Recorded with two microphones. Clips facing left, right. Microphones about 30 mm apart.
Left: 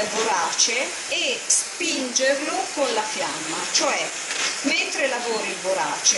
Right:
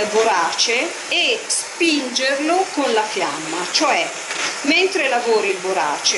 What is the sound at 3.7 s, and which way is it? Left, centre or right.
Speech, right.